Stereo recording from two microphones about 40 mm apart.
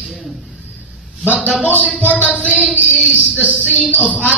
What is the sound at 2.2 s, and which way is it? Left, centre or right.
Speech, left.